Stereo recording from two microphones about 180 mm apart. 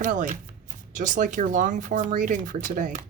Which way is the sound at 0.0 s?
45° right (ahead or behind).